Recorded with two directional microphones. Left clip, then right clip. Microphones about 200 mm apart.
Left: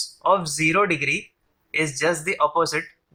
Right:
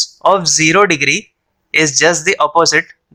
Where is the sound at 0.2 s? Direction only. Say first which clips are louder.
Right 8 dB; 50° right (ahead or behind).